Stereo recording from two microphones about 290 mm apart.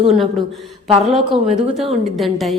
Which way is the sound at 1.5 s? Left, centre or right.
Centre.